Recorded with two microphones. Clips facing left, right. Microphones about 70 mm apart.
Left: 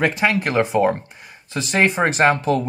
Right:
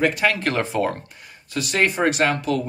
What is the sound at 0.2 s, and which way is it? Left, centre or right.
Speech, centre.